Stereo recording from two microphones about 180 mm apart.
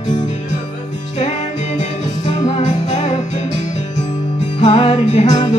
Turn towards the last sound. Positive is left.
turn(degrees=35)  # may be behind; listen again after turning